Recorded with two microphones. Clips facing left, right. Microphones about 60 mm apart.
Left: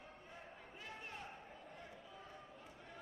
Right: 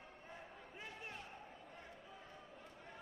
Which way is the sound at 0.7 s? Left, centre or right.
Centre.